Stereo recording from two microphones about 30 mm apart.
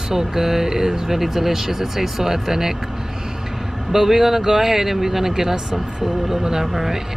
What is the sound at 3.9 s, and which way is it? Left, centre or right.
Speech, centre.